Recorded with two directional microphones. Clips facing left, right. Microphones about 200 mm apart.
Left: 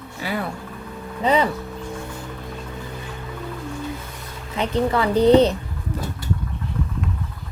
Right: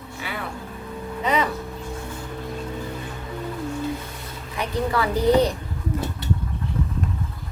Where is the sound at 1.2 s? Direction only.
30° left (ahead or behind).